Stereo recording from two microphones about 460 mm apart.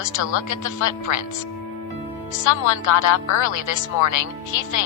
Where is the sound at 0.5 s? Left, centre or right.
Left.